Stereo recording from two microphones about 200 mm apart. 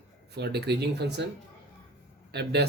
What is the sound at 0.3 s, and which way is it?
Speech, 55° right (ahead or behind).